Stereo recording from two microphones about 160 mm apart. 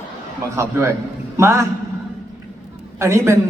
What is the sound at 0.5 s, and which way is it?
A man's voice, 15° right (ahead or behind).